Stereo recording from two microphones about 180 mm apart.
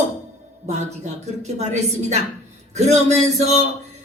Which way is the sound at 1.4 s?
40° right (ahead or behind).